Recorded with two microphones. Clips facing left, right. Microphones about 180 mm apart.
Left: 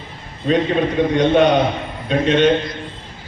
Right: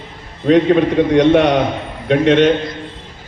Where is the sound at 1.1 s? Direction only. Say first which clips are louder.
Right 2 dB; 75° right (ahead or behind).